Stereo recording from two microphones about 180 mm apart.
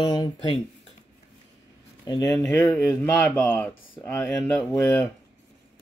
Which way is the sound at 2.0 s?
20° left (ahead or behind).